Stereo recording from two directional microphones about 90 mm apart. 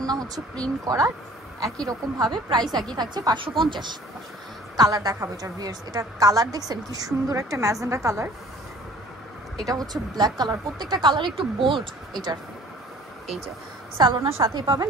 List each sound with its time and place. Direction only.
0.0 s a sound: 45° right (ahead or behind)
0.8 s a woman's voice: 40° right (ahead or behind)
3.3 s speech: 65° right (ahead or behind)
4.7 s a woman's voice: 45° right (ahead or behind)
9.7 s a woman's voice: 45° right (ahead or behind); by 11.9 s 75° right (ahead or behind)
13.9 s speech: 70° right (ahead or behind); by 14.9 s 55° right (ahead or behind)